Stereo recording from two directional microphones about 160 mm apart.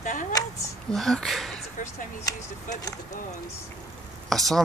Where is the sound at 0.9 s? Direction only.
Centre (ahead or behind).